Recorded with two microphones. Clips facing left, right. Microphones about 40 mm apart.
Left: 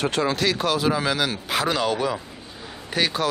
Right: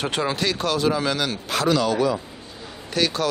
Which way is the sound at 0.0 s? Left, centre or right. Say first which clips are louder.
Left 1 dB; centre.